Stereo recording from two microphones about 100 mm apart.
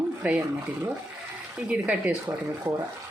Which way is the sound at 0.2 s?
15° right (ahead or behind).